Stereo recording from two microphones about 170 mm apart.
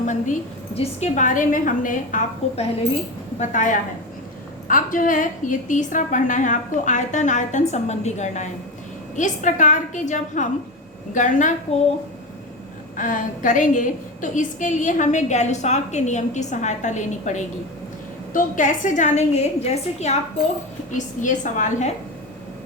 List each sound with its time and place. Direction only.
0.0 s a woman's voice: 45° left (ahead or behind)
13.0 s a woman's voice: 50° left (ahead or behind)